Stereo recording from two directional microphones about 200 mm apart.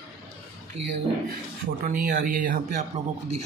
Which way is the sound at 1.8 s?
45° right (ahead or behind).